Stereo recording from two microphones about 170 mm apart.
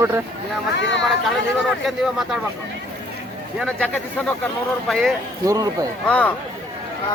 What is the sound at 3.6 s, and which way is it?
Speech, 5° left (ahead or behind).